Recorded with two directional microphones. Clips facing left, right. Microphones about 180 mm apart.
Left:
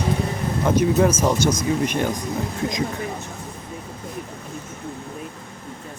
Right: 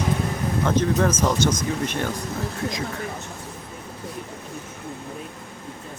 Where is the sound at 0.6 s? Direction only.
10° left (ahead or behind).